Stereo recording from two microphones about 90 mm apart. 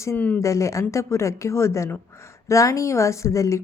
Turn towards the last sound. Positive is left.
turn(degrees=35)  # may be behind; listen again after turning